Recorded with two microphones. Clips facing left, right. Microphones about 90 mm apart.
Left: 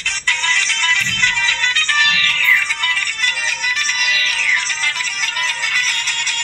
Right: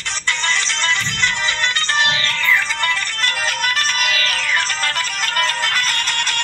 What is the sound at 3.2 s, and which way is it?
Music, 50° right (ahead or behind).